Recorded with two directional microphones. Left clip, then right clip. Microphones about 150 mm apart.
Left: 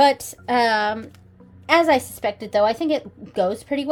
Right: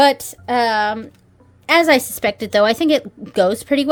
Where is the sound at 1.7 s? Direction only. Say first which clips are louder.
Right 3 dB; 45° right (ahead or behind).